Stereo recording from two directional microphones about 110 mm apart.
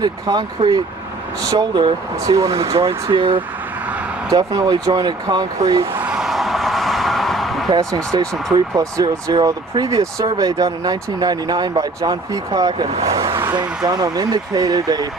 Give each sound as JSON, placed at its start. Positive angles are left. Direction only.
{"t": 0.0, "sound": "speech", "side_deg": -40}
{"t": 2.3, "sound": "speech", "side_deg": -30}
{"t": 2.7, "sound": "speech", "side_deg": -55}
{"t": 4.3, "sound": "speech", "side_deg": -35}
{"t": 5.8, "sound": "a sound", "side_deg": -20}
{"t": 6.1, "sound": "a sound", "side_deg": 0}
{"t": 7.8, "sound": "speech", "side_deg": -30}
{"t": 13.0, "sound": "vehicle", "side_deg": -30}
{"t": 13.6, "sound": "speech", "side_deg": -40}